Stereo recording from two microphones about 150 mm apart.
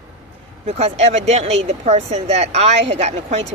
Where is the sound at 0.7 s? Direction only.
45° right (ahead or behind).